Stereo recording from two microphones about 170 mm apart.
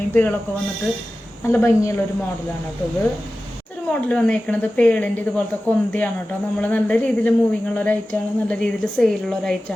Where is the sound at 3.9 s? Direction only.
5° left (ahead or behind).